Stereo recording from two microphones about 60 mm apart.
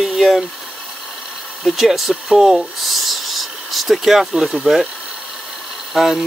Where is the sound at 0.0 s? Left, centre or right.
Centre.